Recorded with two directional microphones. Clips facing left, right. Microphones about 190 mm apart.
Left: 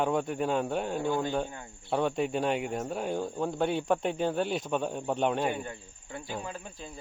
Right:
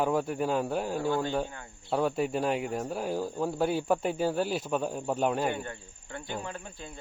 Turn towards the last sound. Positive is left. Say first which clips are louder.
# even
turn(degrees=10)  # may be behind; listen again after turning